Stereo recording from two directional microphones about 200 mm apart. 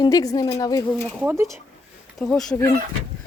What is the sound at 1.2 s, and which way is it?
Speech, 15° right (ahead or behind).